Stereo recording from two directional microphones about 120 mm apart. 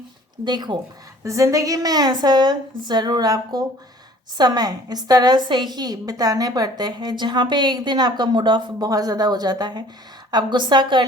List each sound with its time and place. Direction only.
0.4 s a woman's voice: 35° right (ahead or behind)
1.2 s a woman's voice: 25° right (ahead or behind)